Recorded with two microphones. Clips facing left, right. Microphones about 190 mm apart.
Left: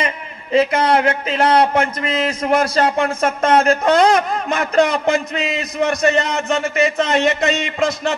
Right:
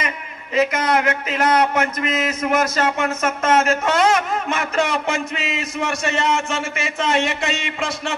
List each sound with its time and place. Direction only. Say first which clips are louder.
0.0 s a man's voice: left 4 dB; 30° left (ahead or behind)